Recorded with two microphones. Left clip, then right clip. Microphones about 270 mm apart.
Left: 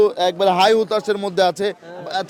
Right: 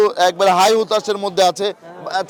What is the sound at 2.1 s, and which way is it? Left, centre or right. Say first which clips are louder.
Speech: right 3 dB; right.